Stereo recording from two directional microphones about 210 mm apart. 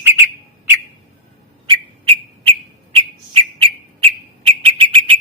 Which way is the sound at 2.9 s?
30° right (ahead or behind).